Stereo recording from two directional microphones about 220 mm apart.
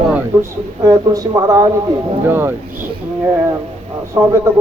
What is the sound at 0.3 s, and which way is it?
Speech, 10° right (ahead or behind).